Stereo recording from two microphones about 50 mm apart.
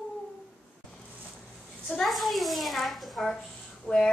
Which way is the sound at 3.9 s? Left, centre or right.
Left.